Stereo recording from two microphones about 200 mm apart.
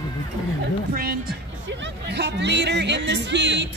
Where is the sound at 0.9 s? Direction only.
45° right (ahead or behind).